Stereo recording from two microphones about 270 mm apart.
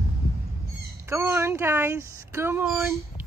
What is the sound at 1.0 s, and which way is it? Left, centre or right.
A woman's voice, centre.